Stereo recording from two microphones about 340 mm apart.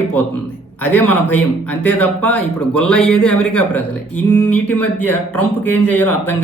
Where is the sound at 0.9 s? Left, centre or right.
Left.